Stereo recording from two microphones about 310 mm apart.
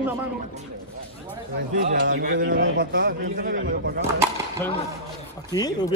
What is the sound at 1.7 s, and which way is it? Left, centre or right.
Speech, right.